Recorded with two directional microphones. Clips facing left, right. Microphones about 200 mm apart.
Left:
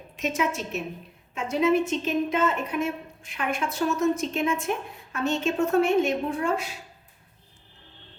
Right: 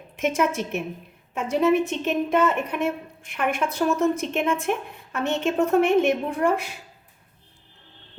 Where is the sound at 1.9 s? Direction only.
60° right (ahead or behind).